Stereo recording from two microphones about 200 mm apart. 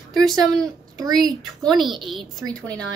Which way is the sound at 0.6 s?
20° right (ahead or behind).